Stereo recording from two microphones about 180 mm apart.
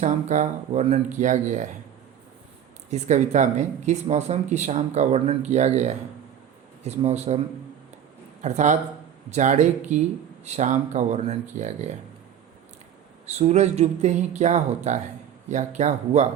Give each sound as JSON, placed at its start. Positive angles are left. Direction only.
{"t": 0.0, "sound": "speech", "side_deg": -40}
{"t": 2.9, "sound": "speech", "side_deg": -40}
{"t": 8.4, "sound": "speech", "side_deg": -40}
{"t": 13.2, "sound": "speech", "side_deg": -35}